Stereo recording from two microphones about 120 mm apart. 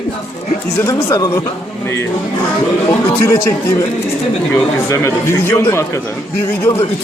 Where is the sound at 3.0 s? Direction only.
20° left (ahead or behind).